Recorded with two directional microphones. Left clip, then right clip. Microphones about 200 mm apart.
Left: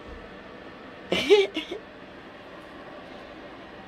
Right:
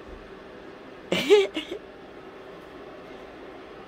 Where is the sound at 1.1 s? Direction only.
5° right (ahead or behind).